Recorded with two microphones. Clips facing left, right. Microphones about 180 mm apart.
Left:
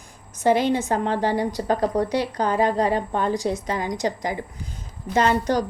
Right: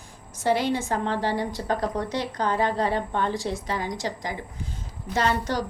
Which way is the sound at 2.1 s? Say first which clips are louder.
Left 4 dB; 10° left (ahead or behind).